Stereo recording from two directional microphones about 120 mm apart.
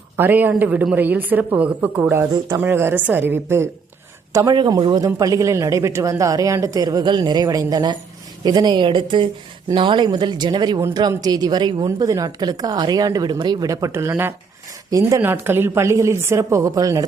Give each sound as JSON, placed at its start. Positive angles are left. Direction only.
{"t": 0.2, "sound": "a woman's voice", "side_deg": -15}
{"t": 4.5, "sound": "a man's voice", "side_deg": -40}
{"t": 11.9, "sound": "speech", "side_deg": -30}
{"t": 14.8, "sound": "speech", "side_deg": -30}
{"t": 15.2, "sound": "a man's voice", "side_deg": -20}